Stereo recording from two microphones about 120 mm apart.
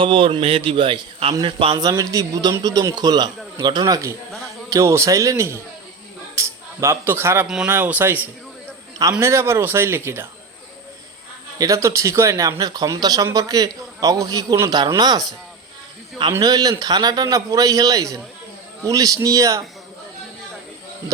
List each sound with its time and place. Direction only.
0.0 s a man's voice: 45° right (ahead or behind)
1.8 s a man's voice: 30° right (ahead or behind)
6.3 s a sound: 25° right (ahead or behind)
7.4 s speech: 5° right (ahead or behind)
7.7 s a man's voice: 15° right (ahead or behind)
11.5 s a man's voice: 30° right (ahead or behind)
16.4 s a man's voice: 30° right (ahead or behind)